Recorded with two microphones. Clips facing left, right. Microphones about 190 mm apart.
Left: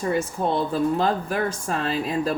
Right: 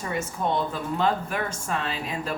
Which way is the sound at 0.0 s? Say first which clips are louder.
Left 5 dB; 35° left (ahead or behind).